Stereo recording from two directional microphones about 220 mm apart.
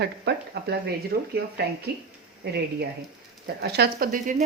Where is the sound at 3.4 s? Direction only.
50° right (ahead or behind).